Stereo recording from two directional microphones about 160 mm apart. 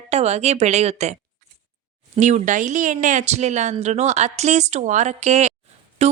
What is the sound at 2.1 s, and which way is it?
A woman's voice, 50° right (ahead or behind).